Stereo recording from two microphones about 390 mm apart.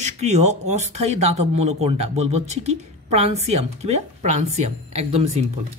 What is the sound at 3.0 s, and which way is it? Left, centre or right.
A woman's voice, centre.